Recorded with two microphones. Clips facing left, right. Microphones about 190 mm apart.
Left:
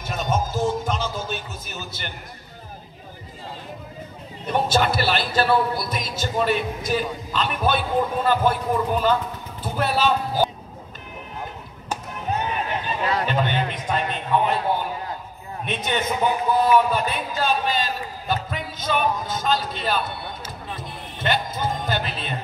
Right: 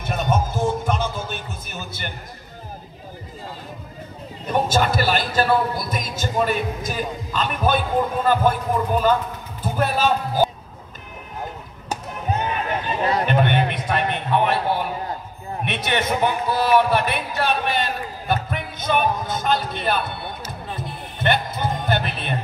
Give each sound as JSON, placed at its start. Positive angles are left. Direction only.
{"t": 0.0, "sound": "music", "side_deg": -55}
{"t": 4.5, "sound": "a man's voice", "side_deg": -45}
{"t": 13.2, "sound": "a sound", "side_deg": -60}
{"t": 15.6, "sound": "a man's voice", "side_deg": -75}
{"t": 21.2, "sound": "music", "side_deg": -60}